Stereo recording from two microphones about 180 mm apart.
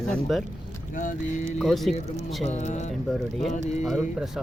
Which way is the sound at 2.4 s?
40° left (ahead or behind).